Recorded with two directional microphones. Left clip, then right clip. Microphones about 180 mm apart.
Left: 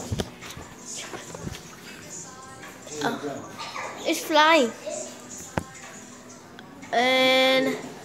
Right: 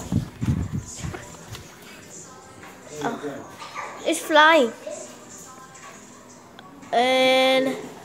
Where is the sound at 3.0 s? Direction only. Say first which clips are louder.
Even; 5° left (ahead or behind).